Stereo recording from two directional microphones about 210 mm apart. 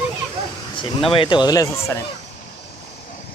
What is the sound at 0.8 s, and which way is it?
Speech, 25° left (ahead or behind).